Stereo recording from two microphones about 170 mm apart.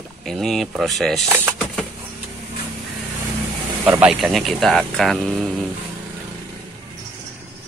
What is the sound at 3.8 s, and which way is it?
Speech, 15° right (ahead or behind).